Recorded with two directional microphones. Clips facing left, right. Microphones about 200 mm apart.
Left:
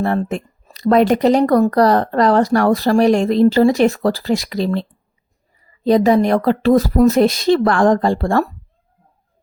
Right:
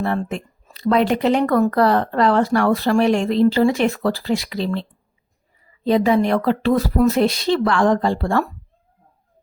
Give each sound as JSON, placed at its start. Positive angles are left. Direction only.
{"t": 0.0, "sound": "a woman's voice", "side_deg": 45}